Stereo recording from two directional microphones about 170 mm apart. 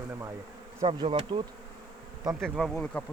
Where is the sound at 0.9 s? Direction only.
35° right (ahead or behind).